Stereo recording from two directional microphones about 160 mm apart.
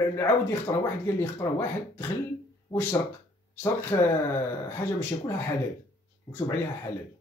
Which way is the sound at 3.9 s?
20° left (ahead or behind).